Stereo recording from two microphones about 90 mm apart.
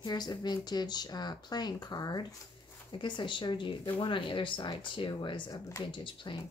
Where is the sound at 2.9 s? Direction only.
60° left (ahead or behind).